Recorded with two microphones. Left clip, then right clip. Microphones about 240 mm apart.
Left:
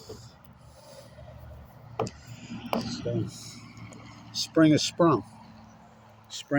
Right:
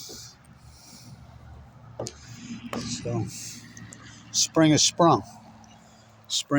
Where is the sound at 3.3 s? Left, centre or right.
Right.